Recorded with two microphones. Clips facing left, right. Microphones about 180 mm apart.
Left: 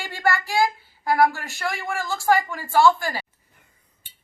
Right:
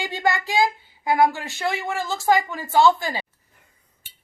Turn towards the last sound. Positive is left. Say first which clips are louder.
# even
turn(degrees=-20)  # may be behind; listen again after turning